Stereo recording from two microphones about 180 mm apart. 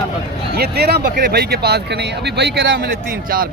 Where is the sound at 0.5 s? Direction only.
60° right (ahead or behind).